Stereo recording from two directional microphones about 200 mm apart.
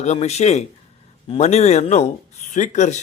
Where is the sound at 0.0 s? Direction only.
35° left (ahead or behind).